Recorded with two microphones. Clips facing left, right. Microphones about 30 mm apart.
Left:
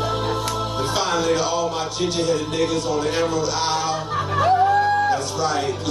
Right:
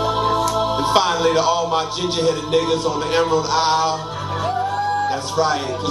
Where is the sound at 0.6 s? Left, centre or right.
Right.